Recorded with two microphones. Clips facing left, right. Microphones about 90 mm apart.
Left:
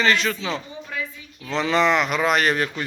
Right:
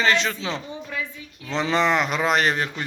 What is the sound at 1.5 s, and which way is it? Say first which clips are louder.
Speech: left 2 dB; 30° right (ahead or behind).